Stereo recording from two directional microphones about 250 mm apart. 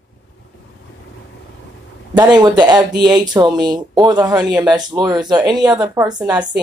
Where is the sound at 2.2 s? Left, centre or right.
Centre.